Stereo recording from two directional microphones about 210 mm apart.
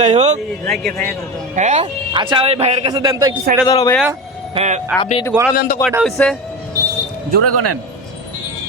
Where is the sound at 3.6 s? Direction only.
15° left (ahead or behind).